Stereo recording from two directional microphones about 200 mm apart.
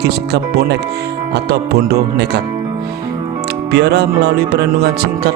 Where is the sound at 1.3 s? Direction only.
50° right (ahead or behind).